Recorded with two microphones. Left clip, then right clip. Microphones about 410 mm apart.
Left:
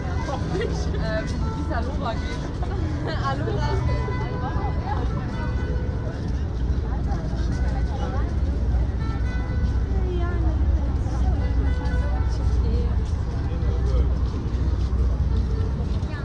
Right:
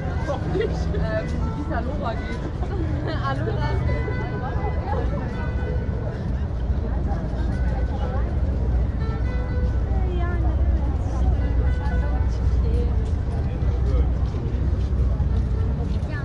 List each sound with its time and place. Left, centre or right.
0.6 s speech: left